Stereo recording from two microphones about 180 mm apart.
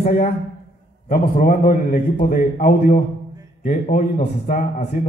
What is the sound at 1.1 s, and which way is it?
Speech, 50° left (ahead or behind).